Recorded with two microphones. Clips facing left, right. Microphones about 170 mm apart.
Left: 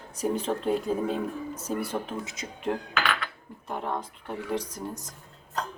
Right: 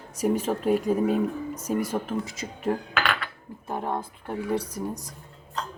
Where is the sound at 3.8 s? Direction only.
10° right (ahead or behind).